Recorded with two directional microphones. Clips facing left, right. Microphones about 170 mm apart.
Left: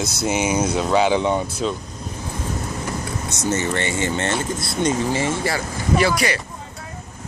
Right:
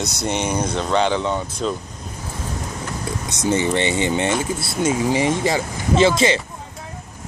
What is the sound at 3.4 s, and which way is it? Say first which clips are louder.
Speech: right 4 dB; 15° right (ahead or behind).